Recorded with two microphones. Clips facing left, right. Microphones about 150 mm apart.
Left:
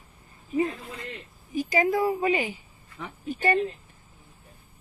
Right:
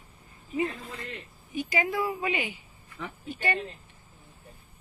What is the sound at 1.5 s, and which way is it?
Speech, 40° left (ahead or behind).